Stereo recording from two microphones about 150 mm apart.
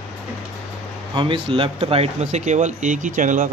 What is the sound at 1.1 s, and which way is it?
Speech, 35° right (ahead or behind).